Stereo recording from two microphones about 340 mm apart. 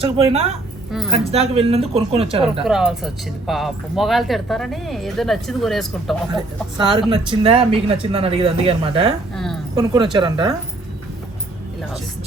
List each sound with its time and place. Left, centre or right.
0.0 s speech: centre
2.6 s speech: centre
6.7 s speech: centre
9.3 s a sound: centre
9.7 s speech: centre